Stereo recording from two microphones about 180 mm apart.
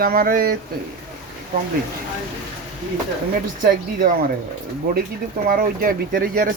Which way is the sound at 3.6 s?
50° right (ahead or behind).